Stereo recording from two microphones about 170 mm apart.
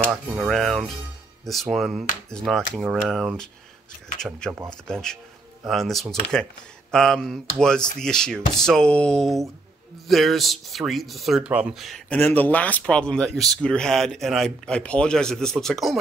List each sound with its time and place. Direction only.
0.1 s speech: 10° right (ahead or behind)
0.5 s speech: centre (ahead or behind)
12.2 s speech: 10° left (ahead or behind)